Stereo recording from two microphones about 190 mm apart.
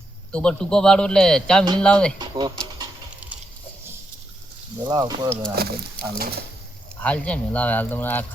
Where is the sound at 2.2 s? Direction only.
20° right (ahead or behind).